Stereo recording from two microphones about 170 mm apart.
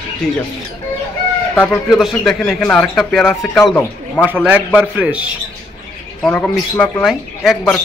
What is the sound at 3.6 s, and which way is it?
Speech, 15° left (ahead or behind).